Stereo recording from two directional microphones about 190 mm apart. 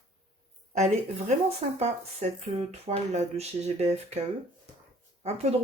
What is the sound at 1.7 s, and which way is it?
Speech, 35° right (ahead or behind).